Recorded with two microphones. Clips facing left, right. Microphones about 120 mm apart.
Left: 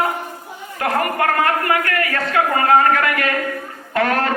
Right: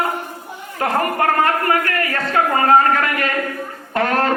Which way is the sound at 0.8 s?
30° right (ahead or behind).